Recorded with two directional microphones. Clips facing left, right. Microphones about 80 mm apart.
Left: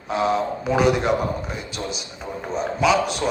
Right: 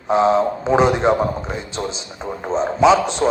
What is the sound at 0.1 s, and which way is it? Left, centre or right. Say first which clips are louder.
A man's voice: right 6 dB; right.